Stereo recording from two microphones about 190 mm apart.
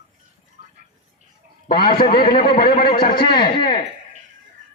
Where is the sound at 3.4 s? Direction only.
25° left (ahead or behind).